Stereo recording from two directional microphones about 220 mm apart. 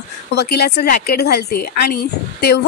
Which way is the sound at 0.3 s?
45° left (ahead or behind).